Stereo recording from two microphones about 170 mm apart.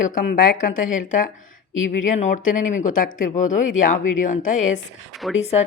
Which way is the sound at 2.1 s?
45° left (ahead or behind).